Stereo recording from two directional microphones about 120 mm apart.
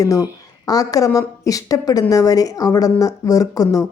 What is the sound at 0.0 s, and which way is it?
Speech, 30° left (ahead or behind).